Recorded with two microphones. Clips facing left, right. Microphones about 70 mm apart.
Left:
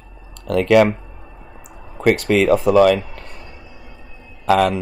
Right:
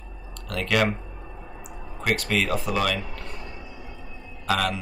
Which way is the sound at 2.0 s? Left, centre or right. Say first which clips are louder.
Left 10 dB; left.